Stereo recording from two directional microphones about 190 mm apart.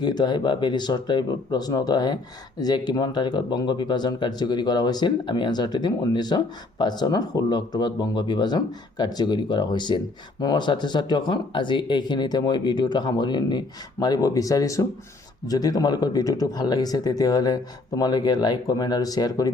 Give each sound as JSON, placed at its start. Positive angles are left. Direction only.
{"t": 0.0, "sound": "speech", "side_deg": 20}